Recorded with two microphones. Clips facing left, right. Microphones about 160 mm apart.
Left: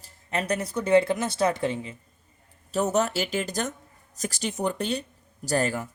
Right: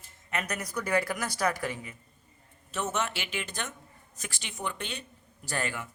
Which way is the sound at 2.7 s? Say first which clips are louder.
Left 8 dB; 40° left (ahead or behind).